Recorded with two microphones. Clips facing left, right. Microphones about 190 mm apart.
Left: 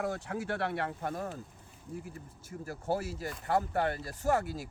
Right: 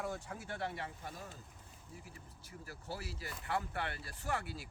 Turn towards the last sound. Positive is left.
turn(degrees=45)  # may be behind; listen again after turning